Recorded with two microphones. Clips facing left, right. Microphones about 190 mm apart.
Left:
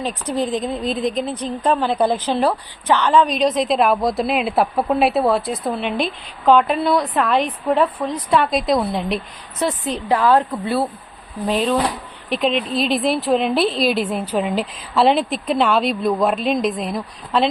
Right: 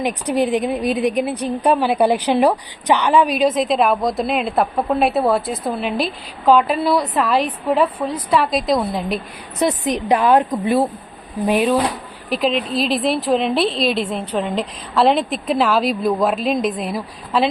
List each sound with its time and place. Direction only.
0.0 s a woman's voice: 15° right (ahead or behind)
9.6 s a woman's voice: 15° right (ahead or behind)
12.3 s a woman's voice: centre (ahead or behind)